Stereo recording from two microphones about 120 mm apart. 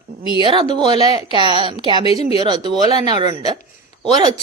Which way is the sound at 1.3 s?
45° right (ahead or behind).